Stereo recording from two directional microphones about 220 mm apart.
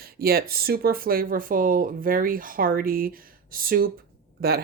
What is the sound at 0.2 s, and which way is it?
Speech, 45° right (ahead or behind).